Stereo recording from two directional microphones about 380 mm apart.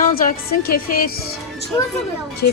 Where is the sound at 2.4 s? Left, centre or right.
Left.